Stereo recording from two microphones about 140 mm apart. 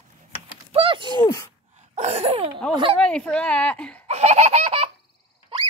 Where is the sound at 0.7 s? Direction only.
40° right (ahead or behind).